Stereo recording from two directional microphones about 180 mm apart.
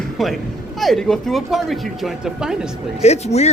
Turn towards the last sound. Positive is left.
turn(degrees=35)  # may be behind; listen again after turning